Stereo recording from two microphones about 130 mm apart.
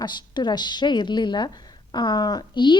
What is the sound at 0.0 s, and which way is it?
A woman's voice, 35° left (ahead or behind).